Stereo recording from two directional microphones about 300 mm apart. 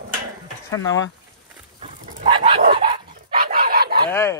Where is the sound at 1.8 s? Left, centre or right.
Right.